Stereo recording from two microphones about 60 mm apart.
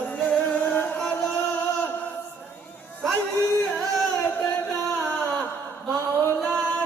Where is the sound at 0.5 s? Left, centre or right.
Left.